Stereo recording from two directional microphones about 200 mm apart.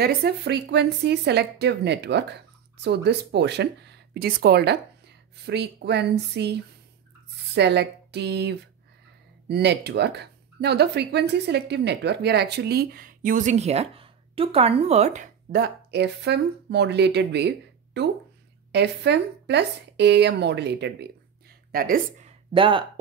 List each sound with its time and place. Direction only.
0.0 s speech: 55° right (ahead or behind); by 15.2 s 35° right (ahead or behind)
15.5 s speech: 55° right (ahead or behind)
21.7 s speech: 45° right (ahead or behind)
22.5 s speech: 25° right (ahead or behind)